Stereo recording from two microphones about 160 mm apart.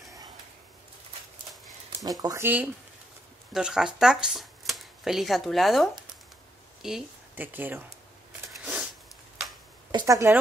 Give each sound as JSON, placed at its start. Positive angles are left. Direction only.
{"t": 2.0, "sound": "speech", "side_deg": -20}
{"t": 9.8, "sound": "a woman's voice", "side_deg": -25}